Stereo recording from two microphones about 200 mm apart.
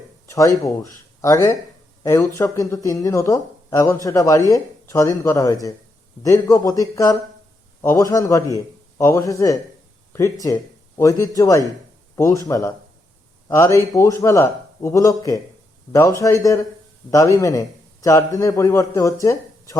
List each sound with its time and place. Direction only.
0.3 s speech: 15° left (ahead or behind)